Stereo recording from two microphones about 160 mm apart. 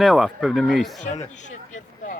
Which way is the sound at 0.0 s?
Centre (ahead or behind).